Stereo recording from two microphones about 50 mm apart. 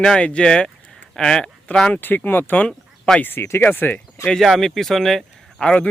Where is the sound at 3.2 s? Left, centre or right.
Left.